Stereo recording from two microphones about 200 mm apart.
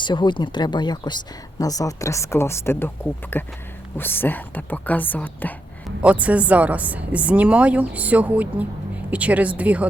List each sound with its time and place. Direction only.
0.0 s speech: 25° left (ahead or behind)
6.0 s a woman's voice: 5° right (ahead or behind)